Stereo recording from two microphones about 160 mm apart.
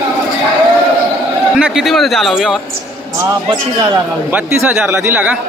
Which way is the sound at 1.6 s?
5° right (ahead or behind).